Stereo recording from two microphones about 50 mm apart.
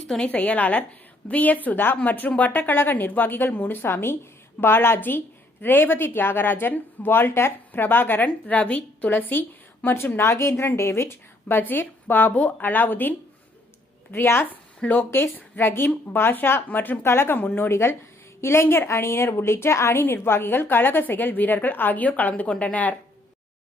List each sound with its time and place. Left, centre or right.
0.2 s a woman's voice: left
8.2 s a woman's voice: left
9.0 s a woman's voice: left
10.2 s a woman's voice: left
14.1 s a woman's voice: left
14.8 s a woman's voice: left
16.6 s a woman's voice: left
17.1 s a woman's voice: left
20.0 s a woman's voice: left